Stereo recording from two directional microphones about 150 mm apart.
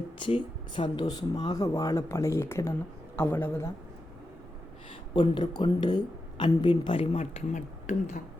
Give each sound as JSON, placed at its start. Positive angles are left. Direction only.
{"t": 0.2, "sound": "a man's voice", "side_deg": 35}
{"t": 5.1, "sound": "speech", "side_deg": 35}